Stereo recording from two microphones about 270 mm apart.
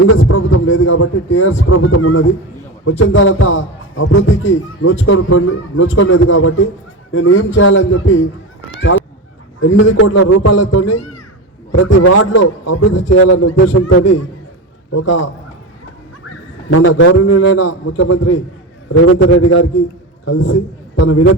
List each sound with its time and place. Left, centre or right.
0.1 s a man's voice: left
9.6 s a man's voice: left
9.9 s a man's voice: left
11.7 s a man's voice: left
16.6 s a man's voice: left
21.0 s a man's voice: left